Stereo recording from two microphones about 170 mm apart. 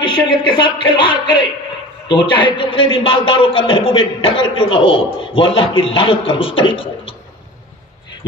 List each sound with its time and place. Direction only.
0.0 s a man's voice: 25° left (ahead or behind)